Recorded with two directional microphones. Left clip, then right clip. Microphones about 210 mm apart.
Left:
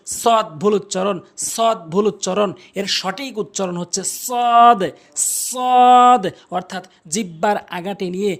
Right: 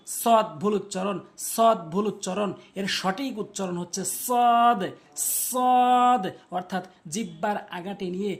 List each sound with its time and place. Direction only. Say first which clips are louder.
0.1 s speech: left 5 dB; 35° left (ahead or behind)